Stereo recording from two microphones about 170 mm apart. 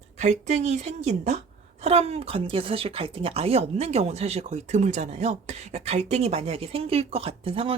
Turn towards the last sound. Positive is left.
turn(degrees=-30)  # may be behind; listen again after turning